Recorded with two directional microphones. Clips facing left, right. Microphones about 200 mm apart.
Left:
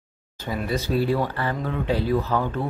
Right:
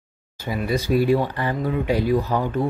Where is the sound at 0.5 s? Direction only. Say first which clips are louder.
Right 3 dB; 10° right (ahead or behind).